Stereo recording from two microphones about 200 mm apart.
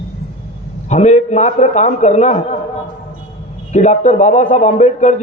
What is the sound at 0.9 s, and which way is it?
A man's voice, 35° left (ahead or behind).